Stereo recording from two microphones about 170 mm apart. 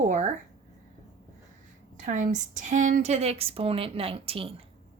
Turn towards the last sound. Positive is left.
turn(degrees=-35)  # may be behind; listen again after turning